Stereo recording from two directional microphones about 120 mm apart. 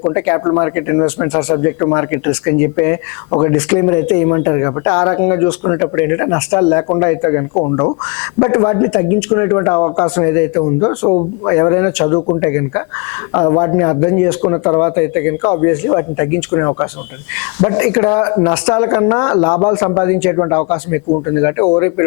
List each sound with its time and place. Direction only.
0.0 s speech: 25° left (ahead or behind)